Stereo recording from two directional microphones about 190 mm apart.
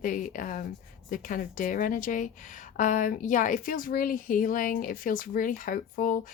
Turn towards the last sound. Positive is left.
turn(degrees=45)  # may be behind; listen again after turning